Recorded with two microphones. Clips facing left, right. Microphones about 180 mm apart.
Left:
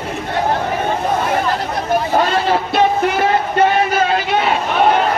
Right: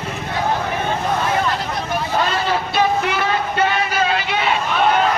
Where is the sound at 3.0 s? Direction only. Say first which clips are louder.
Left 5 dB; 45° left (ahead or behind).